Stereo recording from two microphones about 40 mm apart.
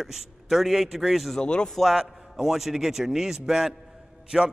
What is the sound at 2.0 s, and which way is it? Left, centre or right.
A man's voice, centre.